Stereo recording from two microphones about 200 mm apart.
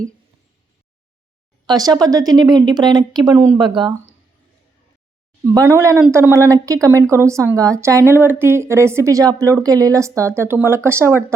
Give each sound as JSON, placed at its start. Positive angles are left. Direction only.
{"t": 1.6, "sound": "speech", "side_deg": -20}
{"t": 5.5, "sound": "a woman's voice", "side_deg": -15}